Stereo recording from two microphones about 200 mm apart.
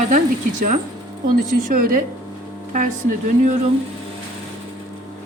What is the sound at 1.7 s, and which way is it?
Speech, 45° right (ahead or behind).